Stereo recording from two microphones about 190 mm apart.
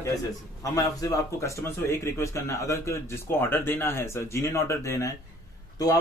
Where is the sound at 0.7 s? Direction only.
15° left (ahead or behind).